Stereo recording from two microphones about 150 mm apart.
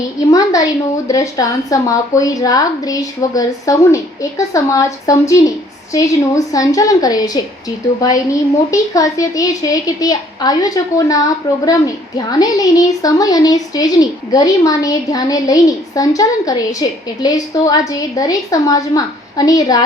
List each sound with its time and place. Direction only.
0.3 s a woman's voice: 25° left (ahead or behind)
8.7 s a woman's voice: 20° left (ahead or behind)